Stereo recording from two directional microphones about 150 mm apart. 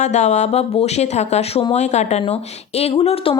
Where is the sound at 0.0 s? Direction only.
50° left (ahead or behind).